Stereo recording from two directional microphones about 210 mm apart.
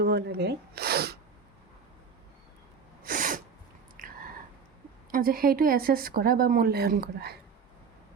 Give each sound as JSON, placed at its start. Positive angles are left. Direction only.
{"t": 0.0, "sound": "speech", "side_deg": -50}
{"t": 3.0, "sound": "sneeze", "side_deg": -40}
{"t": 4.0, "sound": "biting", "side_deg": -40}
{"t": 5.1, "sound": "speech", "side_deg": -45}